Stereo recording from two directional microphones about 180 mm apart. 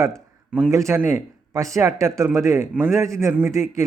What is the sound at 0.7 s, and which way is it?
Speech, 15° right (ahead or behind).